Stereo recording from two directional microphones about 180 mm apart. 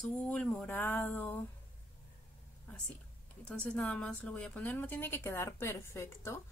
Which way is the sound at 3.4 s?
5° left (ahead or behind).